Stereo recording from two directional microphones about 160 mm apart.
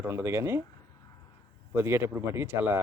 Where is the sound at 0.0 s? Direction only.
15° right (ahead or behind).